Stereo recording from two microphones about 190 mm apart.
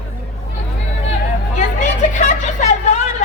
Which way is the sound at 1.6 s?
40° left (ahead or behind).